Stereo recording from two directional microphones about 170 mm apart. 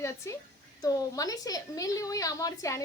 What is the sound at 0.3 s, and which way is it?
A woman's voice, 15° left (ahead or behind).